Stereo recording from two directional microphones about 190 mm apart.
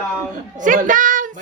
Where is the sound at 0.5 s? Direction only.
45° right (ahead or behind).